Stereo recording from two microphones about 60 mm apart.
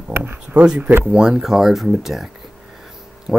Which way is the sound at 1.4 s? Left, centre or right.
Centre.